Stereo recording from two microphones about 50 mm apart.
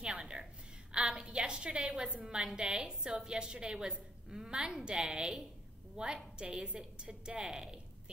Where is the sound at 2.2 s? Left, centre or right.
Centre.